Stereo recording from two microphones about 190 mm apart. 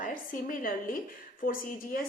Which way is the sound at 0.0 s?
45° left (ahead or behind).